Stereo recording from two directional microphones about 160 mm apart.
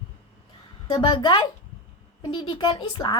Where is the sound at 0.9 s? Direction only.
30° left (ahead or behind).